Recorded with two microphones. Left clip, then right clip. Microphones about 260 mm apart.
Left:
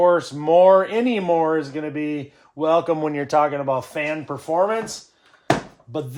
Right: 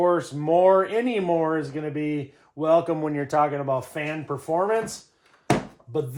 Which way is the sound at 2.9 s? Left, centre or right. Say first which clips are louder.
Left 4 dB; left.